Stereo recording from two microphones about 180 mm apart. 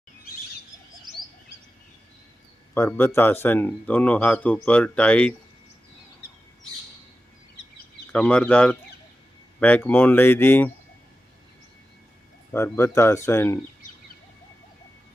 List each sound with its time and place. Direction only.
2.7 s speech: 15° left (ahead or behind)
8.1 s speech: 5° left (ahead or behind)
12.5 s speech: 15° left (ahead or behind)